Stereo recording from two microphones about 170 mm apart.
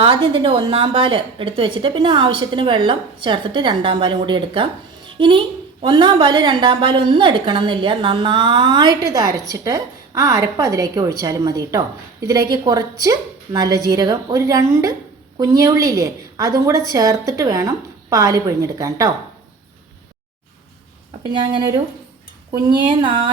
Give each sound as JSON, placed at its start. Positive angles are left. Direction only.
{"t": 0.0, "sound": "a woman's voice", "side_deg": -30}
{"t": 23.0, "sound": "a woman's voice", "side_deg": -25}